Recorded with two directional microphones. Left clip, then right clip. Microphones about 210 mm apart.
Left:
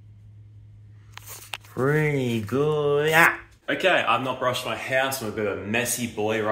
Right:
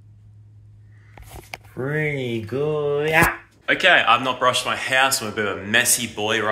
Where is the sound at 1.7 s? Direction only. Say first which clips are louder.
Left 4 dB; 20° left (ahead or behind).